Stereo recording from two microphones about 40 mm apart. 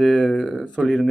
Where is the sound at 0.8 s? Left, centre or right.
Centre.